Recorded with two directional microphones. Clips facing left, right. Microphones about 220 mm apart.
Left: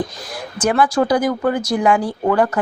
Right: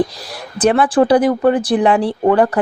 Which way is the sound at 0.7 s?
25° right (ahead or behind).